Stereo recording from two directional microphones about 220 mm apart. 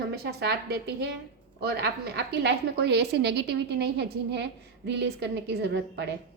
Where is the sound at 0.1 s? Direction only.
45° right (ahead or behind).